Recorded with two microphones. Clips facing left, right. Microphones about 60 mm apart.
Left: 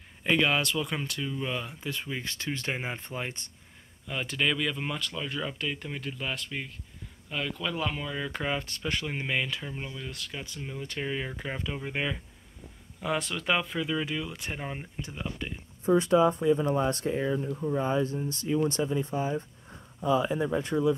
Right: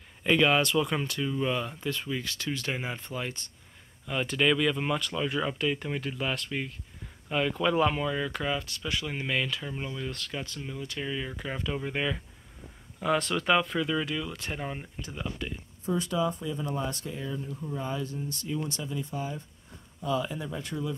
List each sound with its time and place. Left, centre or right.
0.2 s speech: centre; by 3.5 s left
4.1 s speech: centre
7.2 s speech: centre
8.3 s speech: left
8.6 s speech: left
9.0 s speech: centre
10.8 s speech: left; by 12.2 s centre
13.0 s speech: centre
15.3 s speech: left